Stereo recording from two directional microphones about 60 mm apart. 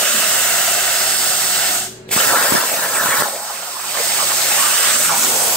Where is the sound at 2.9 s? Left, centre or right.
Centre.